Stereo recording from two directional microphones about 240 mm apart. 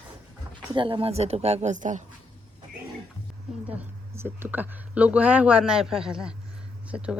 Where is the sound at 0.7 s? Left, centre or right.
Right.